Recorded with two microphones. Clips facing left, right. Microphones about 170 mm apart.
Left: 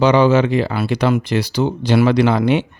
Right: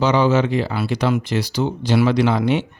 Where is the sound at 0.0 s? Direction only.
65° left (ahead or behind).